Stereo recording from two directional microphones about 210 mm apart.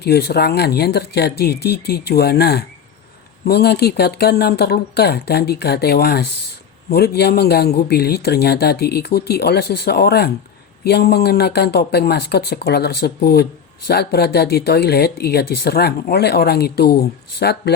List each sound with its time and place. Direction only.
0.0 s speech: 50° left (ahead or behind)